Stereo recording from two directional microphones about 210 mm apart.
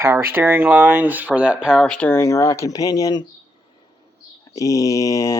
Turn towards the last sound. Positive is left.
turn(degrees=15)  # may be behind; listen again after turning